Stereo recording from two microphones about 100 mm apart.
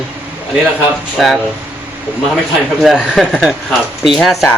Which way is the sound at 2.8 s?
5° right (ahead or behind).